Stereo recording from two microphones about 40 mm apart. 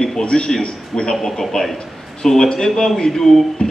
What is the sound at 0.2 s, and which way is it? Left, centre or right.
Speech, left.